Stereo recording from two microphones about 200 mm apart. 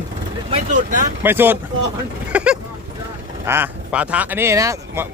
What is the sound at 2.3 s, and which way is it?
Vehicle, 5° right (ahead or behind).